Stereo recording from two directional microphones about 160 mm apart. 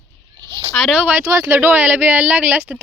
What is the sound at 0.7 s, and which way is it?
Speech, 5° right (ahead or behind).